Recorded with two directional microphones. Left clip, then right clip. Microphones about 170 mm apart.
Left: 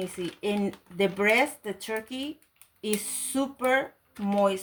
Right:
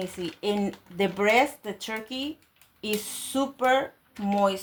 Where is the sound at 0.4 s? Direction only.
25° right (ahead or behind).